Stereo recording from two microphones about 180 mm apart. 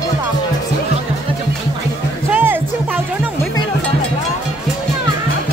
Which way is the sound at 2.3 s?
10° right (ahead or behind).